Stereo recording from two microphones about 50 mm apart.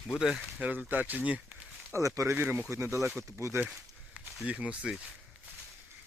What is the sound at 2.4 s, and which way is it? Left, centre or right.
Speech, right.